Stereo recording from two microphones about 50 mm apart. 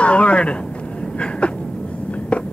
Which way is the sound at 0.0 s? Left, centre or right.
Left.